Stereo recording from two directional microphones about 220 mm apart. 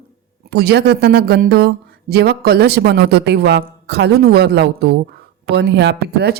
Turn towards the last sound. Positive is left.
turn(degrees=-50)  # may be behind; listen again after turning